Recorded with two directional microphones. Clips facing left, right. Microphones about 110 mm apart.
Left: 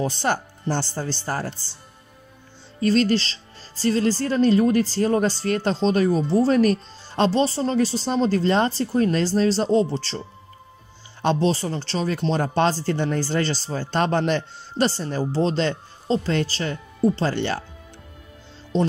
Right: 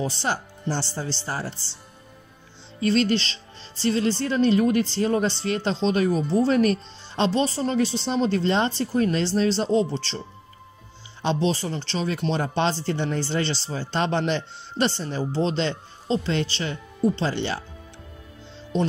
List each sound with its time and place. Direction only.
0.0 s speech: 50° left (ahead or behind)
2.8 s speech: 40° left (ahead or behind)
11.2 s speech: 40° left (ahead or behind)